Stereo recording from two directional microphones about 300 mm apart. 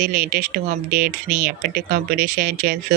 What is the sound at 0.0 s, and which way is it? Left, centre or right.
Speech, right.